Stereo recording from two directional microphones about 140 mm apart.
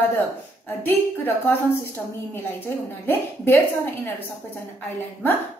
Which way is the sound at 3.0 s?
15° left (ahead or behind).